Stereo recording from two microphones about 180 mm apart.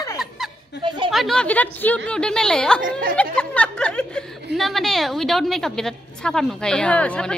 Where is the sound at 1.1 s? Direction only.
Centre (ahead or behind).